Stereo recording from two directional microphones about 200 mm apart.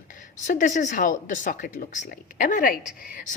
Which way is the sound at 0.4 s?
40° left (ahead or behind).